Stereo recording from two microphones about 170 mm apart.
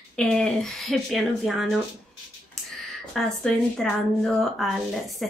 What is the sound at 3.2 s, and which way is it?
Speech, centre (ahead or behind).